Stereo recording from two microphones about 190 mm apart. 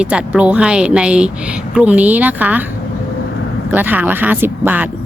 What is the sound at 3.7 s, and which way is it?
Speech, 10° right (ahead or behind).